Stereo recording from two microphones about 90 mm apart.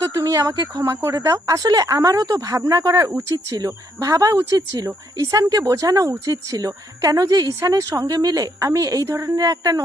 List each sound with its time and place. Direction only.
0.0 s speech: 45° right (ahead or behind)